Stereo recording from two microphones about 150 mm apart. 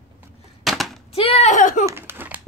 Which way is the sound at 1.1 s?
40° left (ahead or behind).